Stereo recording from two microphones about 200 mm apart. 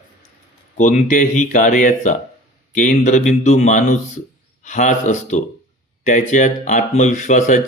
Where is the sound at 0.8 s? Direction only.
40° left (ahead or behind).